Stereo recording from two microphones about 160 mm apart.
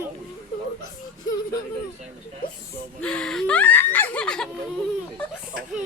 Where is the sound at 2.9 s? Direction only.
5° left (ahead or behind).